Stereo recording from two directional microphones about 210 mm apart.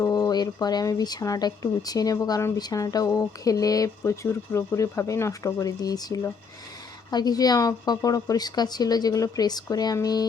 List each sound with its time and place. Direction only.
0.0 s a woman's voice: 20° left (ahead or behind)